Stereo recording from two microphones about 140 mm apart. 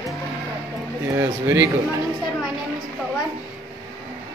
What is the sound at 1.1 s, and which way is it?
Speech, 20° right (ahead or behind).